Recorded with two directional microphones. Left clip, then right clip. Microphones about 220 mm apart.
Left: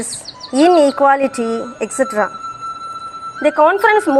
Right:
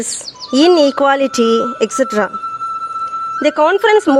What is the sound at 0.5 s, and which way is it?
Speech, 40° right (ahead or behind).